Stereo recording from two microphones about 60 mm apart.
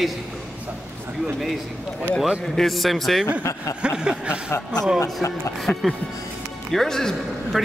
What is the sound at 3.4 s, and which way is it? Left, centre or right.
Speech, left.